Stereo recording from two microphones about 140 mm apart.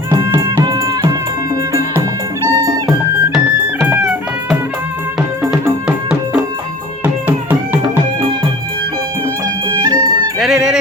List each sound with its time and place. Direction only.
0.3 s music: 30° right (ahead or behind)
3.8 s music: 5° right (ahead or behind)
7.0 s music: 15° right (ahead or behind)
9.8 s music: 25° right (ahead or behind)
10.4 s music: 5° right (ahead or behind)